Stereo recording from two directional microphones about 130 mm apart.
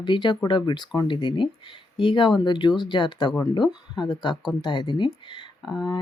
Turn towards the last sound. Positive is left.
turn(degrees=35)  # may be behind; listen again after turning